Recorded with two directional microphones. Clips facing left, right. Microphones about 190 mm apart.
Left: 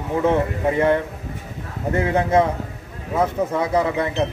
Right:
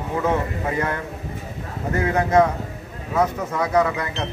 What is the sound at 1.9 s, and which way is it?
A man's voice, 25° left (ahead or behind).